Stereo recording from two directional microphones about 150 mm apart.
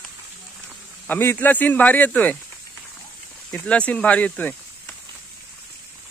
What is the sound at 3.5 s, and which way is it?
Speech, 10° left (ahead or behind).